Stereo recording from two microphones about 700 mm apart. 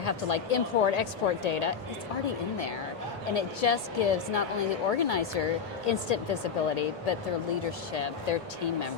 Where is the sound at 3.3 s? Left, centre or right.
Left.